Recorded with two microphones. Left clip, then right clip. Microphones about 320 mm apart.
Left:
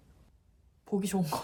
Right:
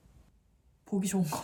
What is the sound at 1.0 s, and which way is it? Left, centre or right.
Speech, centre.